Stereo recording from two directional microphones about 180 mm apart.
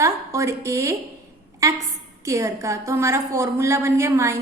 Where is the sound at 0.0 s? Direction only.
15° right (ahead or behind).